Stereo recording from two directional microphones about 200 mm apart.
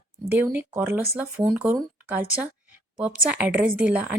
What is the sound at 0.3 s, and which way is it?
A woman's voice, 10° right (ahead or behind).